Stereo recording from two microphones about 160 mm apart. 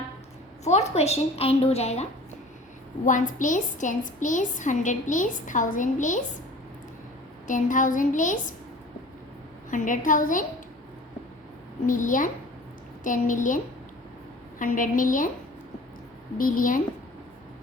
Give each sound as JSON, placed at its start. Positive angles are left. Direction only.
{"t": 0.6, "sound": "a woman's voice", "side_deg": 45}
{"t": 3.1, "sound": "a woman's voice", "side_deg": 55}
{"t": 7.4, "sound": "a woman's voice", "side_deg": 55}
{"t": 9.6, "sound": "a woman's voice", "side_deg": 55}
{"t": 11.9, "sound": "a woman's voice", "side_deg": 55}
{"t": 14.6, "sound": "a woman's voice", "side_deg": 55}
{"t": 16.4, "sound": "a woman's voice", "side_deg": 60}